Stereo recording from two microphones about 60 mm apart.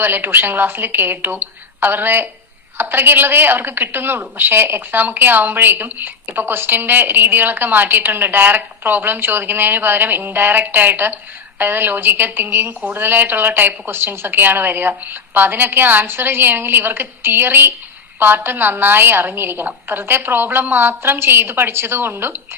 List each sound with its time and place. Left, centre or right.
0.0 s a woman's voice: right